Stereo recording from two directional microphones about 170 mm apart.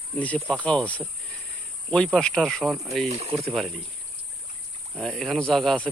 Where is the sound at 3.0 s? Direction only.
35° right (ahead or behind).